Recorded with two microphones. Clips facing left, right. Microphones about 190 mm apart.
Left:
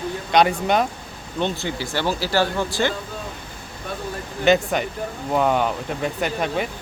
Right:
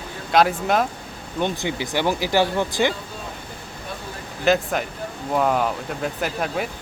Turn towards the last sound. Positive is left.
turn(degrees=0)  # may be behind; listen again after turning